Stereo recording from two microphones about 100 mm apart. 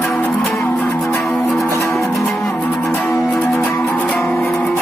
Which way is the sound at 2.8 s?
20° left (ahead or behind).